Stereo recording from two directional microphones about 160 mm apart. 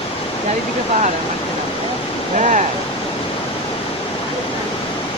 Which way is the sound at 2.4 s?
50° right (ahead or behind).